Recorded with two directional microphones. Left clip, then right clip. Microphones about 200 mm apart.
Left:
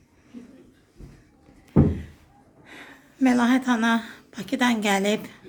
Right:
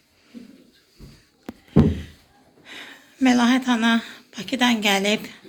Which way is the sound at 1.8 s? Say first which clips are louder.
Right 2 dB; 5° left (ahead or behind).